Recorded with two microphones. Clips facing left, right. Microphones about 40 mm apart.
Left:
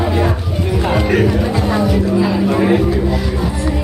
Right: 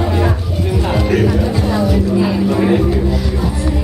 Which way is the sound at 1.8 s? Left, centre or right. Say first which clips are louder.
Even; centre.